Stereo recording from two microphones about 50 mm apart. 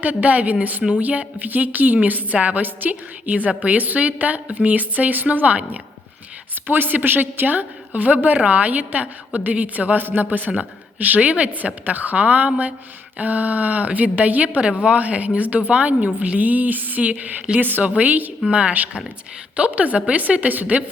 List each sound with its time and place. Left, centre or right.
0.0 s a woman's voice: right
6.7 s a woman's voice: right
17.6 s a woman's voice: right
18.4 s a woman's voice: right